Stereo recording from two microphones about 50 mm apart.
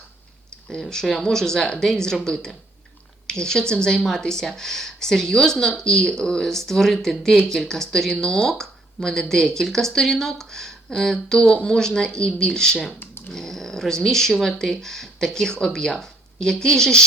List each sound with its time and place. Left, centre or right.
0.7 s speech: centre
13.0 s typing: left
13.3 s speech: centre